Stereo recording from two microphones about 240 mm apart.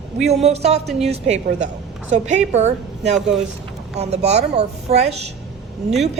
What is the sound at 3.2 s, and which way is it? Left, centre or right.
Speech, centre.